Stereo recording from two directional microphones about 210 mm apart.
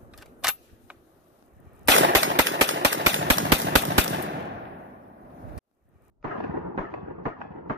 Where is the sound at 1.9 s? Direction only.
65° right (ahead or behind).